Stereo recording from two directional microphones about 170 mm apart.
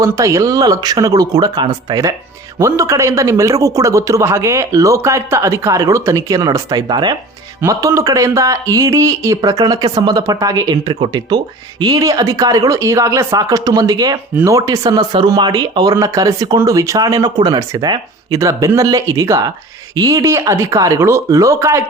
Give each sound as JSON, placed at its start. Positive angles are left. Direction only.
{"t": 0.0, "sound": "a man's voice", "side_deg": -20}